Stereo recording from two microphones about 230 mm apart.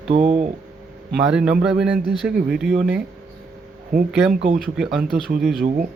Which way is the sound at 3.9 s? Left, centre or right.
Right.